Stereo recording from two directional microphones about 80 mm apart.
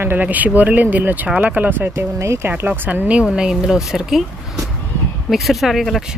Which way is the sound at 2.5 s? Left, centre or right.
Right.